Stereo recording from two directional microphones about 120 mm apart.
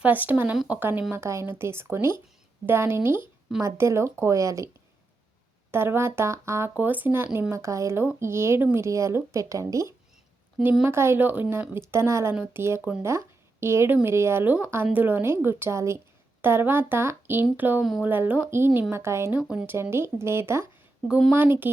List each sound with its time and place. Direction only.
0.0 s speech: 15° right (ahead or behind)
5.7 s speech: 20° right (ahead or behind)
19.4 s speech: 10° right (ahead or behind)
19.7 s speech: 20° right (ahead or behind)
21.1 s speech: 5° right (ahead or behind)
21.3 s speech: 15° right (ahead or behind)